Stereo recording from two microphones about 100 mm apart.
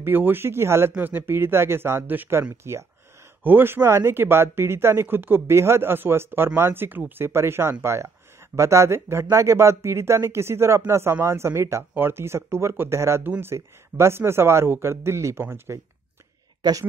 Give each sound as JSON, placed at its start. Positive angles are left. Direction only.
{"t": 0.0, "sound": "speech", "side_deg": -20}
{"t": 16.6, "sound": "speech", "side_deg": -45}